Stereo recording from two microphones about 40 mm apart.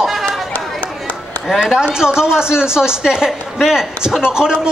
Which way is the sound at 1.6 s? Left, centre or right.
Right.